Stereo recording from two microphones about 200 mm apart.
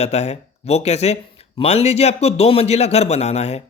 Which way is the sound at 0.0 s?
30° left (ahead or behind).